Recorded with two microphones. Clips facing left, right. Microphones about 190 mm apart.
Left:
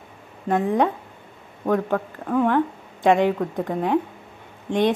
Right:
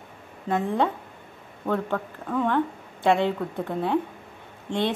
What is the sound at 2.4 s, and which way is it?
A woman's voice, 15° left (ahead or behind).